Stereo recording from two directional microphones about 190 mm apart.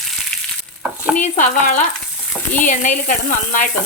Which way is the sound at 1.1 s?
40° left (ahead or behind).